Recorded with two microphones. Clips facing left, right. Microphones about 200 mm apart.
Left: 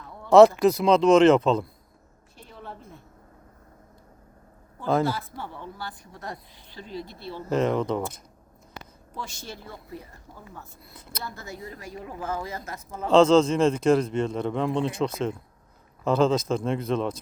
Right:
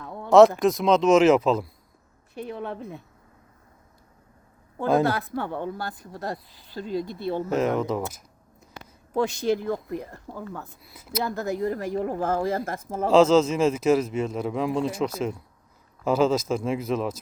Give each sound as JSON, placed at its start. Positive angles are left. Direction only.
{"t": 0.3, "sound": "speech", "side_deg": 0}
{"t": 2.3, "sound": "speech", "side_deg": -60}
{"t": 5.0, "sound": "speech", "side_deg": -65}
{"t": 6.1, "sound": "speech", "side_deg": -35}
{"t": 7.5, "sound": "speech", "side_deg": -5}
{"t": 9.7, "sound": "speech", "side_deg": -65}
{"t": 10.8, "sound": "speech", "side_deg": -5}
{"t": 11.2, "sound": "speech", "side_deg": -60}
{"t": 13.1, "sound": "speech", "side_deg": -5}